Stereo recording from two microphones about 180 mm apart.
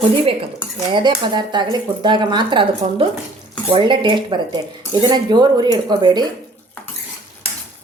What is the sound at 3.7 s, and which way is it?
A woman's voice, 25° right (ahead or behind).